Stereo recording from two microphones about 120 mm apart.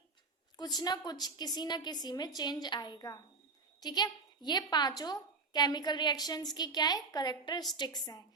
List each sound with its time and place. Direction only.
0.5 s a woman's voice: 35° left (ahead or behind)